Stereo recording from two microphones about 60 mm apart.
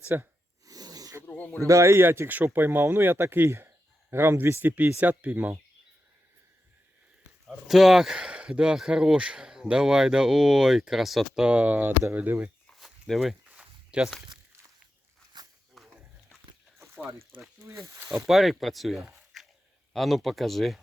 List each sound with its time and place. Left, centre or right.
0.0 s speech: right
0.6 s a sound: right
1.3 s speech: left
1.6 s speech: right
7.4 s speech: centre
11.4 s speech: right
12.7 s walk: centre
13.5 s a sound: centre
15.8 s a sound: centre
18.3 s speech: centre